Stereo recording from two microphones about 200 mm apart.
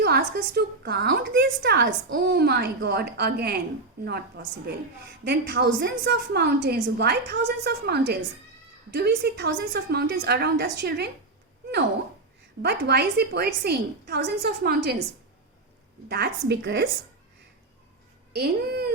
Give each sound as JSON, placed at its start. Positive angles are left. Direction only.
{"t": 0.0, "sound": "a woman's voice", "side_deg": -50}
{"t": 12.6, "sound": "a woman's voice", "side_deg": -55}
{"t": 16.0, "sound": "a woman's voice", "side_deg": -55}
{"t": 18.3, "sound": "a woman's voice", "side_deg": -50}